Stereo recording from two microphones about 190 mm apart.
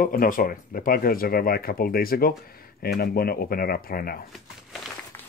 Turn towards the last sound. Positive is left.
turn(degrees=50)  # may be behind; listen again after turning